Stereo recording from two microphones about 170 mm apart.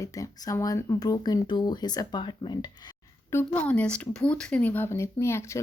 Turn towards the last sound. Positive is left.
turn(degrees=15)  # may be behind; listen again after turning